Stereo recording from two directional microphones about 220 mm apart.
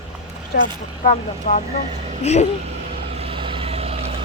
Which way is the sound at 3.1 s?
25° right (ahead or behind).